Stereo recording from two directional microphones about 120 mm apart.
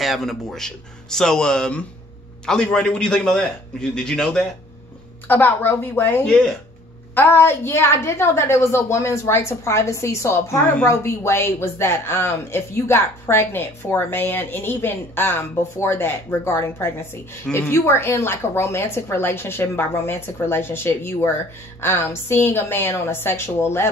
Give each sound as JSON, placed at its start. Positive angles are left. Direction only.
{"t": 0.0, "sound": "a man's voice", "side_deg": 0}
{"t": 5.3, "sound": "a woman's voice", "side_deg": 15}
{"t": 6.2, "sound": "a man's voice", "side_deg": 5}
{"t": 7.2, "sound": "speech", "side_deg": 20}